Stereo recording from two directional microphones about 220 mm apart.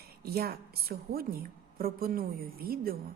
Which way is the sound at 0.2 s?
45° right (ahead or behind).